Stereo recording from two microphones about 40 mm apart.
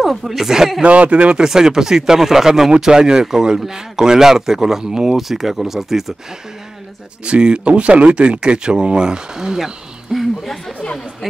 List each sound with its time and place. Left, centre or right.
0.0 s speech: centre
0.8 s speech: right
1.3 s speech: centre
7.2 s speech: right
10.1 s a sound: centre